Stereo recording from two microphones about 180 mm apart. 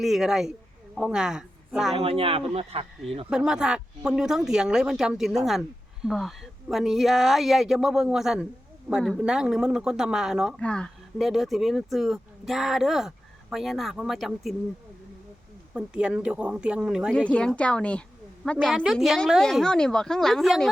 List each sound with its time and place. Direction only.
0.0 s speech: centre (ahead or behind)
2.0 s speech: 30° right (ahead or behind)
3.2 s speech: 5° right (ahead or behind)
15.7 s speech: 5° right (ahead or behind)